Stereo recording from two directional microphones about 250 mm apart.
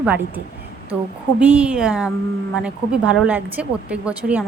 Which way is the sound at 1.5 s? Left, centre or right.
Centre.